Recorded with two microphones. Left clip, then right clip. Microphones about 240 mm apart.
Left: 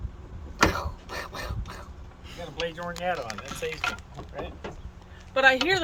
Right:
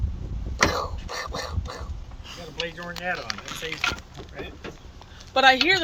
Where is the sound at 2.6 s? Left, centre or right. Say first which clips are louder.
Even; left.